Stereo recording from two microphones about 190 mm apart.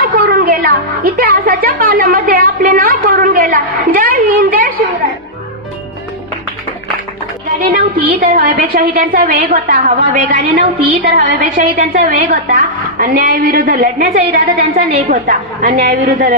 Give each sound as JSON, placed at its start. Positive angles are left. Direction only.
{"t": 0.2, "sound": "music", "side_deg": -50}
{"t": 7.7, "sound": "a woman's voice", "side_deg": -45}
{"t": 11.1, "sound": "a woman's voice", "side_deg": -40}